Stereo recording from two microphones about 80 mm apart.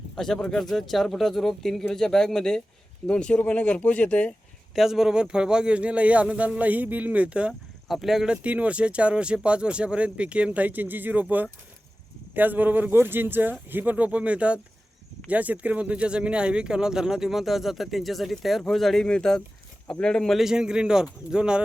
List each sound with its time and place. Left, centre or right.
0.2 s speech: centre
4.7 s speech: centre
7.9 s speech: centre
20.4 s speech: centre